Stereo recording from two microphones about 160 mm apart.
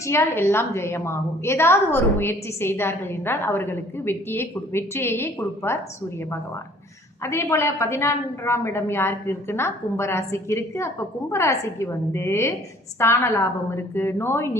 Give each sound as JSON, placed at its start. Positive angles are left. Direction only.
{"t": 0.0, "sound": "a woman's voice", "side_deg": 15}
{"t": 7.2, "sound": "a woman's voice", "side_deg": 20}